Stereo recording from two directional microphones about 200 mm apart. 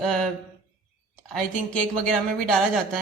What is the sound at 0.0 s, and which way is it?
Speech, centre (ahead or behind).